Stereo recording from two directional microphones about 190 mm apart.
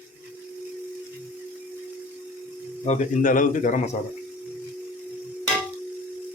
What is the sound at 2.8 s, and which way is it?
Speech, 40° left (ahead or behind).